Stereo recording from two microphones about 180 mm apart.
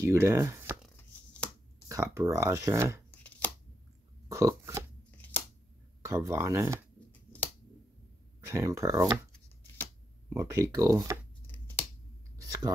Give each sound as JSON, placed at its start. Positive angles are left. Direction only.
{"t": 0.0, "sound": "speech", "side_deg": -15}
{"t": 0.8, "sound": "chopping", "side_deg": 5}
{"t": 1.9, "sound": "speech", "side_deg": -15}
{"t": 3.1, "sound": "chopping", "side_deg": 10}
{"t": 4.3, "sound": "a sound", "side_deg": -15}
{"t": 6.0, "sound": "speech", "side_deg": -15}
{"t": 8.5, "sound": "speech", "side_deg": -15}
{"t": 10.3, "sound": "speech", "side_deg": -20}
{"t": 11.4, "sound": "a sound", "side_deg": 10}
{"t": 12.4, "sound": "clicking", "side_deg": -20}